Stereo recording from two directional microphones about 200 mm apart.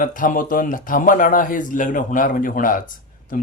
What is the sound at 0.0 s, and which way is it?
A man's voice, 40° left (ahead or behind).